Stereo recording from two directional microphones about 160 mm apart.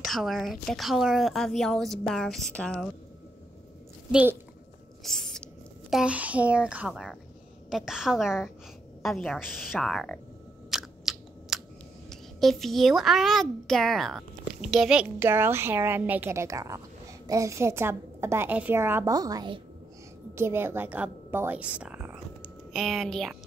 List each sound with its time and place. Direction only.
0.0 s a woman's voice: centre (ahead or behind)
4.1 s a woman's voice: 10° right (ahead or behind)
5.0 s a woman's voice: centre (ahead or behind)
10.7 s chewing: centre (ahead or behind)
12.1 s a woman's voice: centre (ahead or behind); by 19.6 s 25° right (ahead or behind)
20.3 s a woman's voice: 15° right (ahead or behind); by 23.3 s centre (ahead or behind)